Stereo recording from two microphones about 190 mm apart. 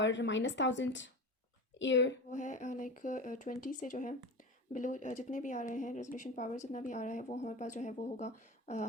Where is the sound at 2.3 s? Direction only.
40° left (ahead or behind).